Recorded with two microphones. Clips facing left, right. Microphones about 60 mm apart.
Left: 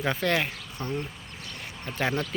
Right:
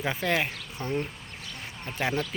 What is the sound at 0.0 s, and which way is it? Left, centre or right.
Speech, centre.